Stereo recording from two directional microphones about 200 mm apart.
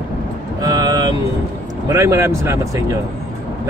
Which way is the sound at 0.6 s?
20° right (ahead or behind).